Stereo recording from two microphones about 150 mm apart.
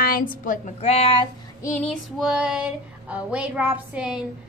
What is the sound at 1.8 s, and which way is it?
Female singing, centre (ahead or behind).